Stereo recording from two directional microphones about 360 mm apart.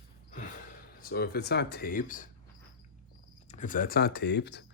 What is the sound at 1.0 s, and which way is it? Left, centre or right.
Speech, left.